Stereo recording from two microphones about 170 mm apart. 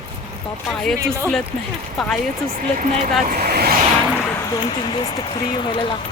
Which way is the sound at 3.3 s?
65° right (ahead or behind).